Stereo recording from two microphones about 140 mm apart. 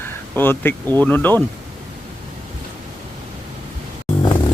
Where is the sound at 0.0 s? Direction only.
15° left (ahead or behind).